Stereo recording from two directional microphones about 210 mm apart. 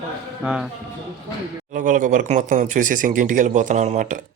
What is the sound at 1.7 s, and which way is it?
Speech, 40° right (ahead or behind).